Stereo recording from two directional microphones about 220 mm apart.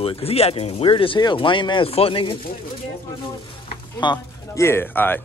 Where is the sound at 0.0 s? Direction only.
25° left (ahead or behind).